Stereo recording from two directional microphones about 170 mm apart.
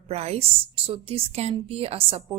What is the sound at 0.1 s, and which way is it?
A woman's voice, 35° right (ahead or behind).